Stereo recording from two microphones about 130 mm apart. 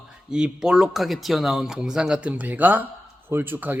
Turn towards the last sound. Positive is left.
turn(degrees=-15)  # may be behind; listen again after turning